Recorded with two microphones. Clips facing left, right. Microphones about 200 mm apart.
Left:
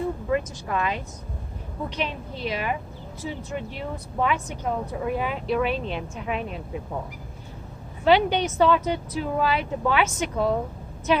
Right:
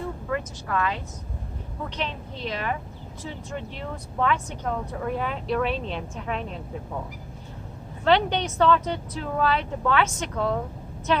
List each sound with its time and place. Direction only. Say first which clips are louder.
0.3 s a woman's voice: left 3 dB; 20° left (ahead or behind)
8.0 s speech: left 2 dB; 5° left (ahead or behind)